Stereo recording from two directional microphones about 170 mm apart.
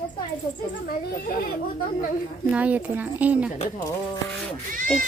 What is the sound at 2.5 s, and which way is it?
Speech, 10° right (ahead or behind).